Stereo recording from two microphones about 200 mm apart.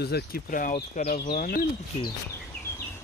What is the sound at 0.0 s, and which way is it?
Speech, 50° left (ahead or behind).